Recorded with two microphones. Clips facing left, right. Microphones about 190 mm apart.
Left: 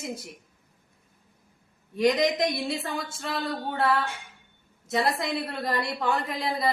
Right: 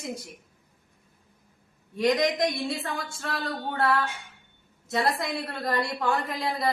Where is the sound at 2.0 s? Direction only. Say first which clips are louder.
Left 1 dB; centre (ahead or behind).